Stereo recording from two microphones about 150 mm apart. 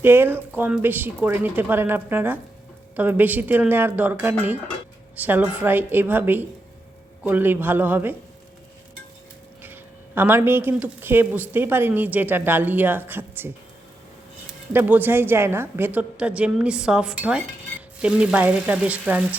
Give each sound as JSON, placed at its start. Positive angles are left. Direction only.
{"t": 0.0, "sound": "a woman's voice", "side_deg": -15}
{"t": 10.2, "sound": "a woman's voice", "side_deg": -15}
{"t": 14.7, "sound": "a woman's voice", "side_deg": -15}